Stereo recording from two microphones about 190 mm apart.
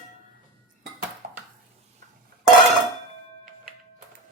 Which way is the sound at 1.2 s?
50° right (ahead or behind).